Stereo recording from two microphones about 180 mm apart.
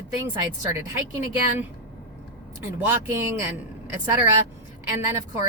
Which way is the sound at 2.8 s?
10° right (ahead or behind).